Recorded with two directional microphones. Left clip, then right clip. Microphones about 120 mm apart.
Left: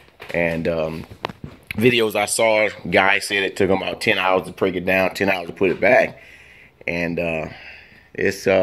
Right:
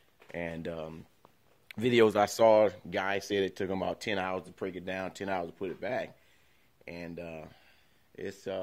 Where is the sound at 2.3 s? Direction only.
45° right (ahead or behind).